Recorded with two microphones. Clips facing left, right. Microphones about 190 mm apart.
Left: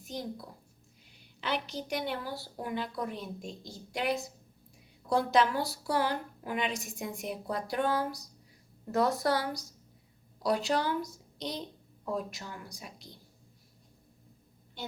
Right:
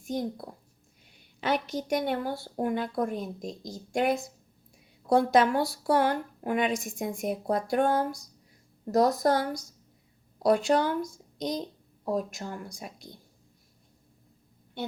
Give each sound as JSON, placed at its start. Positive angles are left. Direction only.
{"t": 0.0, "sound": "a woman's voice", "side_deg": -50}